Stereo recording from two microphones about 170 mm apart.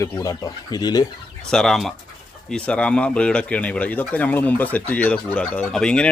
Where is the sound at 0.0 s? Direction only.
20° left (ahead or behind).